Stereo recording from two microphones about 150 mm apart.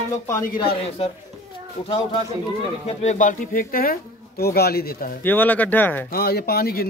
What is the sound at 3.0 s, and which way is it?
Speech, 55° left (ahead or behind).